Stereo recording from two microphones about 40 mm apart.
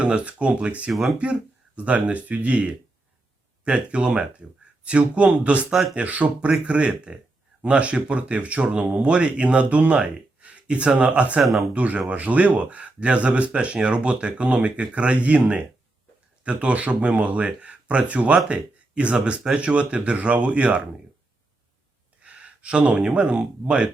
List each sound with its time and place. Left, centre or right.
0.0 s speech: right
11.4 s speech: centre
11.7 s speech: right
22.2 s speech: right